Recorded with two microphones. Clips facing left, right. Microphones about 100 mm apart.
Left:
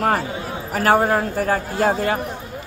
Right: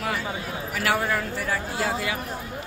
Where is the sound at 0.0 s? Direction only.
45° left (ahead or behind).